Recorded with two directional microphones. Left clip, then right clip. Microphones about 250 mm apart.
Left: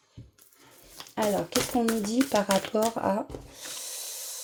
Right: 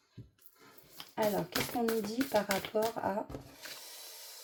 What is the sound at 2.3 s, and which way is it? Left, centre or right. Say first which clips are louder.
Speech: left 5 dB; left.